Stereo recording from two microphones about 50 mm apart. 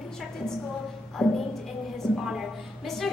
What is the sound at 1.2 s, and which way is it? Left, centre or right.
Speech, centre.